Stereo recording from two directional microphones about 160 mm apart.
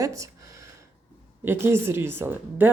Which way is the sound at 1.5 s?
15° right (ahead or behind).